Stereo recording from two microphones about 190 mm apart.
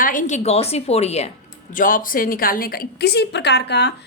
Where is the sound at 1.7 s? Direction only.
45° left (ahead or behind).